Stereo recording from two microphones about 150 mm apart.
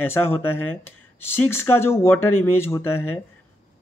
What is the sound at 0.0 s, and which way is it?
Speech, 15° left (ahead or behind).